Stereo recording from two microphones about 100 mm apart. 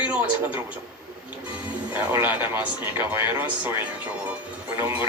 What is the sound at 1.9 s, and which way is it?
A man's voice, 15° right (ahead or behind).